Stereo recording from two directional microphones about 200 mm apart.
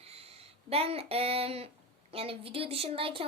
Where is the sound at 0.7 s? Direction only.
30° right (ahead or behind).